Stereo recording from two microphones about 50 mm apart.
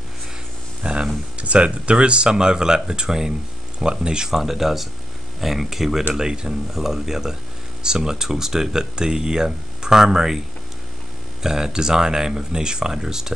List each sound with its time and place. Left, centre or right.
0.8 s speech: right; by 6.0 s centre
6.1 s speech: centre
11.4 s speech: centre